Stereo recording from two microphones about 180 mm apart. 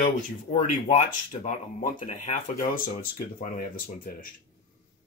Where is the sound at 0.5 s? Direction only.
45° left (ahead or behind).